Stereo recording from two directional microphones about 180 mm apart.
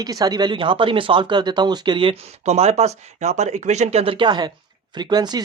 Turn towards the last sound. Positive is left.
turn(degrees=-25)  # may be behind; listen again after turning